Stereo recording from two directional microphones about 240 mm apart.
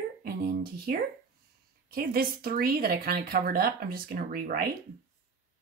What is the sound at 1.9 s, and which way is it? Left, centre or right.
Speech, right.